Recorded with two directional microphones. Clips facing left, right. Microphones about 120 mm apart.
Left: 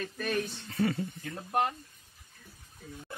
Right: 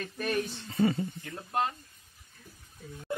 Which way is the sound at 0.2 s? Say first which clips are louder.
Right 2 dB; 10° right (ahead or behind).